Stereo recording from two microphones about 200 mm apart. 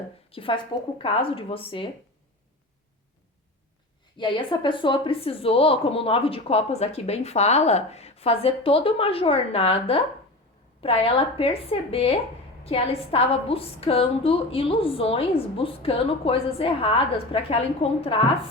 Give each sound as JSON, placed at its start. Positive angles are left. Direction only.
{"t": 0.3, "sound": "speech", "side_deg": 25}
{"t": 4.2, "sound": "speech", "side_deg": 25}